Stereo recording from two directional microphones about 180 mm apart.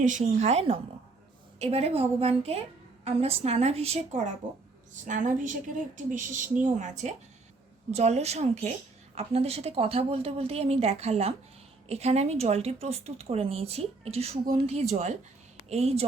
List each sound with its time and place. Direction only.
0.0 s a woman's voice: 40° right (ahead or behind)